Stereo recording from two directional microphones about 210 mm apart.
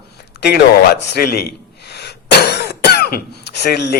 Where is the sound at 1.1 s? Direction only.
50° left (ahead or behind).